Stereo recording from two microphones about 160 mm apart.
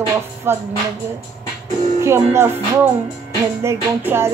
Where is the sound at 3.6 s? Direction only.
15° right (ahead or behind).